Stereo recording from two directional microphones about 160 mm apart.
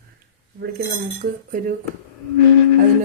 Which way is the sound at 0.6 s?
65° right (ahead or behind).